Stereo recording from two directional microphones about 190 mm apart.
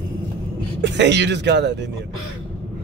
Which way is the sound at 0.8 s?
65° right (ahead or behind).